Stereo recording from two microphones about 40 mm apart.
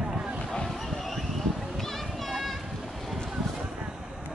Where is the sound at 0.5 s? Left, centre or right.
Centre.